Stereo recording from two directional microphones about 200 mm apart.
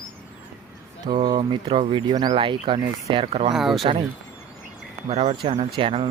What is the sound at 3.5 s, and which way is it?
Speech, centre (ahead or behind).